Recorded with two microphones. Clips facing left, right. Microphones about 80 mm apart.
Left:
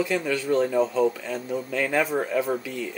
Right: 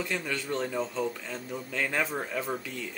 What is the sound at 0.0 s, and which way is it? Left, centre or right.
Speech, centre.